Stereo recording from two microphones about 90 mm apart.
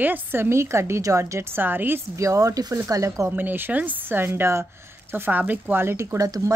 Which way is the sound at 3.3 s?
20° right (ahead or behind).